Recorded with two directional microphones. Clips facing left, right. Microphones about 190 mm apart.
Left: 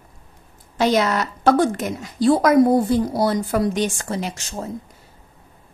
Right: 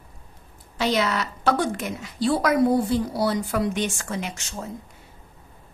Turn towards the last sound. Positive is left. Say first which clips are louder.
# left 4 dB
turn(degrees=35)  # may be behind; listen again after turning